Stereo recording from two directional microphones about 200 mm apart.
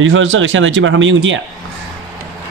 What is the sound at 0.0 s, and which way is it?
Speech, 75° right (ahead or behind).